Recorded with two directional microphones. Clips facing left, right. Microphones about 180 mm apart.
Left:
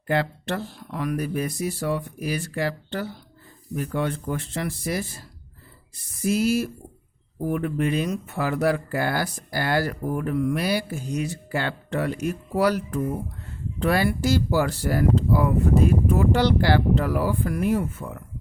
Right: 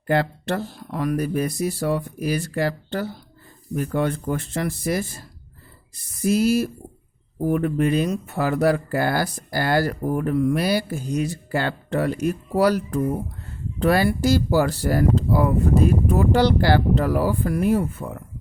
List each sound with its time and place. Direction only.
0.1 s speech: 40° right (ahead or behind)
6.2 s speech: 40° right (ahead or behind)